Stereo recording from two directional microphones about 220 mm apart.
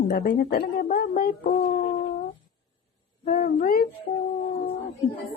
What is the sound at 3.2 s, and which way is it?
Humming, 45° left (ahead or behind).